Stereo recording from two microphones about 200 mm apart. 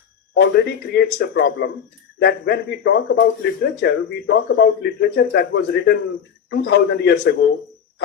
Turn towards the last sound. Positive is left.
turn(degrees=55)  # may be behind; listen again after turning